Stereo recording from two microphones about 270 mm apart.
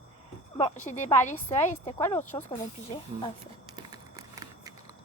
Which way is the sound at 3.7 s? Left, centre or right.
Centre.